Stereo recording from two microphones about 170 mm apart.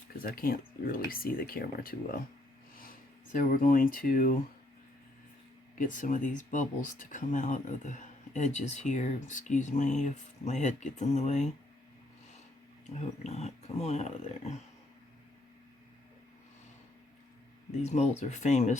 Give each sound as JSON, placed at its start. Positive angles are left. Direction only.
{"t": 0.2, "sound": "speech", "side_deg": 60}
{"t": 3.3, "sound": "speech", "side_deg": 55}
{"t": 5.7, "sound": "speech", "side_deg": 50}
{"t": 13.2, "sound": "speech", "side_deg": 40}
{"t": 17.8, "sound": "speech", "side_deg": 40}